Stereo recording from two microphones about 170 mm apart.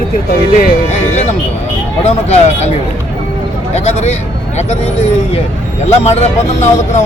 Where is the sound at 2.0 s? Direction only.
40° left (ahead or behind).